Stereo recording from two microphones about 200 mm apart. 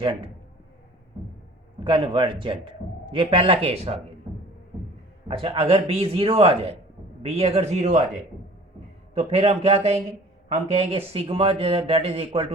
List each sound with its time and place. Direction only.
0.0 s a man's voice: 25° right (ahead or behind)
1.8 s a man's voice: 25° right (ahead or behind)
5.3 s a man's voice: 30° right (ahead or behind)
9.1 s a man's voice: 30° right (ahead or behind)